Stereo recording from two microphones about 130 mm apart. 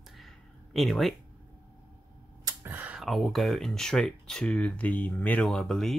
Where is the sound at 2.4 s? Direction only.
15° right (ahead or behind).